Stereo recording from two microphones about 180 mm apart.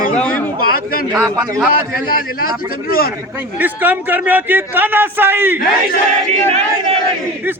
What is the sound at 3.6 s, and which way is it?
A man's voice, 10° right (ahead or behind).